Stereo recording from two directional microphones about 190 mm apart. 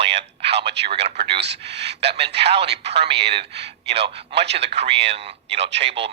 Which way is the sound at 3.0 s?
30° right (ahead or behind).